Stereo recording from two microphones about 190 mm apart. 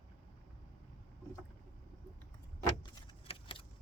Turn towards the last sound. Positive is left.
turn(degrees=30)  # may be behind; listen again after turning